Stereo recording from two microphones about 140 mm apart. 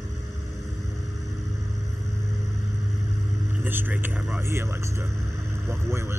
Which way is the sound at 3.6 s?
15° right (ahead or behind).